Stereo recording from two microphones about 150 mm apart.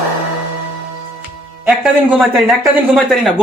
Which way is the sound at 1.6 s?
5° right (ahead or behind).